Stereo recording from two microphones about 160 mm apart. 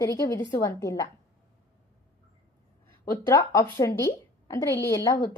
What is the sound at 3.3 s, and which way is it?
A woman's voice, 20° left (ahead or behind).